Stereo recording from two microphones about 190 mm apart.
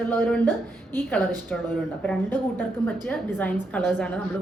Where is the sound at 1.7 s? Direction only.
10° left (ahead or behind).